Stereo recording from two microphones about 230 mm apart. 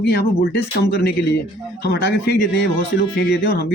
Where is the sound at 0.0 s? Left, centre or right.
Left.